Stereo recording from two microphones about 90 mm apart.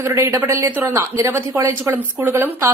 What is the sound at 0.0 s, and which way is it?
A woman's voice, 25° right (ahead or behind).